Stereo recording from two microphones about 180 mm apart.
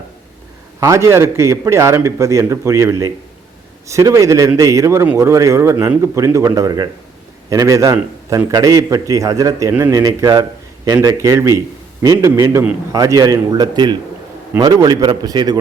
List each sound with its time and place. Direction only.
0.8 s a man's voice: 15° right (ahead or behind)